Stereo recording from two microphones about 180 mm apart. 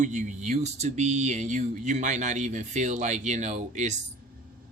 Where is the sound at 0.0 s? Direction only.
40° right (ahead or behind).